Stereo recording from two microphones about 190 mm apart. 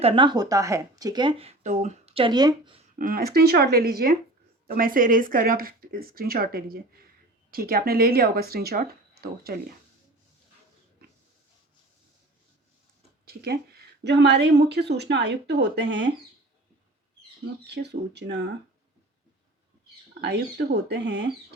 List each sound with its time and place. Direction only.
0.0 s speech: 25° right (ahead or behind)
2.9 s speech: 50° right (ahead or behind)
13.2 s a woman's voice: 55° right (ahead or behind)
17.7 s a woman's voice: 65° right (ahead or behind)
20.2 s a woman's voice: 60° right (ahead or behind)